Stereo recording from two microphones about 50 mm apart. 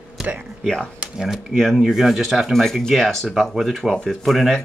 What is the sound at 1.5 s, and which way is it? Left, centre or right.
Speech, centre.